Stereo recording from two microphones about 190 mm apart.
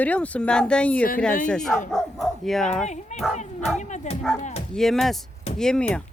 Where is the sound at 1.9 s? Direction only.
Centre (ahead or behind).